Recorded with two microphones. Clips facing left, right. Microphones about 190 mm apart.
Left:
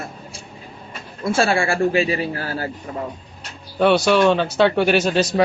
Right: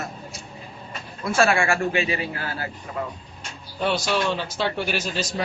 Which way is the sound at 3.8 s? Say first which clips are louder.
Left 9 dB; 60° left (ahead or behind).